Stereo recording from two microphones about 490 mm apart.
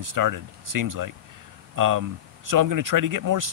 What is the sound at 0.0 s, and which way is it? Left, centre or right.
Speech, right.